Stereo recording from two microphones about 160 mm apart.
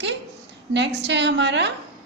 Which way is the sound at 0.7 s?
90° right.